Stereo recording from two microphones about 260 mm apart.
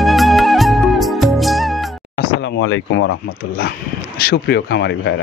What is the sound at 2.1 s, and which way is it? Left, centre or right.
Speech, left.